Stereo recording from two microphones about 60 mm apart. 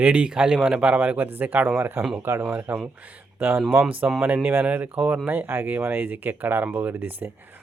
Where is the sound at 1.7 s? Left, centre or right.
Right.